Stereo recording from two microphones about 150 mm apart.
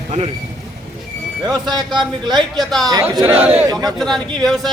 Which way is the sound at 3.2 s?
10° right (ahead or behind).